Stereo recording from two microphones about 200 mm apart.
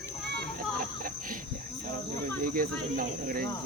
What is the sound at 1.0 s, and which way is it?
Cricket, 40° right (ahead or behind).